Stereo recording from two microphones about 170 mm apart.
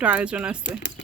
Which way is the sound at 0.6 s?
90° left.